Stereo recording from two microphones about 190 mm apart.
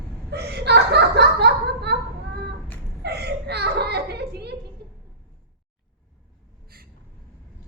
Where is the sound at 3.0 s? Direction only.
60° right (ahead or behind).